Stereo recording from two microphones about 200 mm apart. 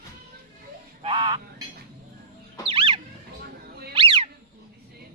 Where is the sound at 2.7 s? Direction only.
25° right (ahead or behind).